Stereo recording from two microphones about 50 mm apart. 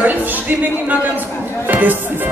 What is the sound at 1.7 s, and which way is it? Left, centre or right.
Speech, right.